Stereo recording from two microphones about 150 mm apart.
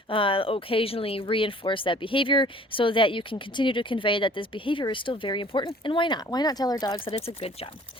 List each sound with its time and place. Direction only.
0.1 s speech: 35° left (ahead or behind)